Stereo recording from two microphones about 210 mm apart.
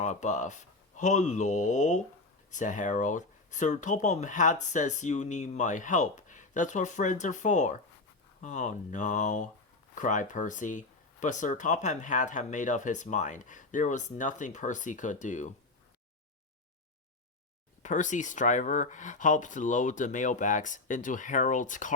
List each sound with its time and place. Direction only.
0.0 s speech: 35° left (ahead or behind)
17.8 s speech: 35° left (ahead or behind)